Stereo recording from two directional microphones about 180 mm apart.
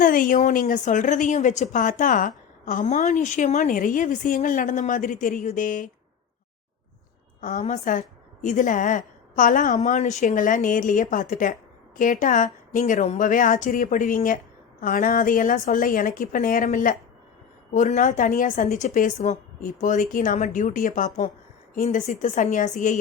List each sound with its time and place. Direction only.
0.0 s a woman's voice: 50° left (ahead or behind)
7.4 s a woman's voice: 45° left (ahead or behind)